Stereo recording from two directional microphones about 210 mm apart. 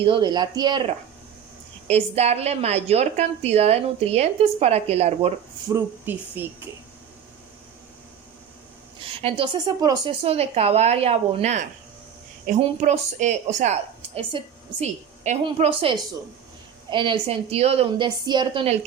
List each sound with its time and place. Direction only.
0.0 s a woman's voice: 25° right (ahead or behind)
1.9 s a woman's voice: 30° right (ahead or behind)
5.6 s speech: 10° right (ahead or behind)
9.0 s a woman's voice: 25° right (ahead or behind)